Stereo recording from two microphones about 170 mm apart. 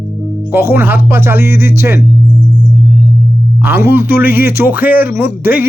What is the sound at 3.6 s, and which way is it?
Speech, 15° right (ahead or behind).